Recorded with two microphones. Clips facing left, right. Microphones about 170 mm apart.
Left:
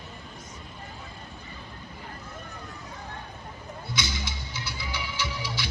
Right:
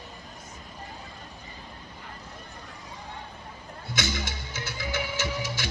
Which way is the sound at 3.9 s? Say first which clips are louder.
Right 3 dB; 50° right (ahead or behind).